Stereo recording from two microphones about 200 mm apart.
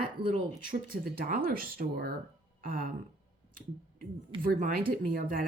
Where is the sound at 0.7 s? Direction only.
45° right (ahead or behind).